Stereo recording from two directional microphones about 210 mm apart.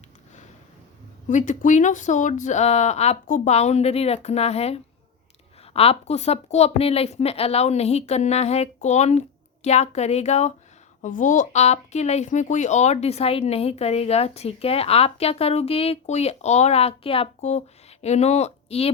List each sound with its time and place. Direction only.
1.3 s speech: 35° left (ahead or behind)